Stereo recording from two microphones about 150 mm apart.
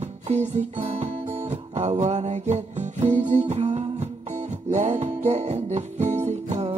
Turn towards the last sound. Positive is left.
turn(degrees=-45)  # may be behind; listen again after turning